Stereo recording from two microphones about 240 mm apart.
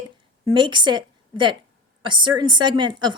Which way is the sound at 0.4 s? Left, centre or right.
Centre.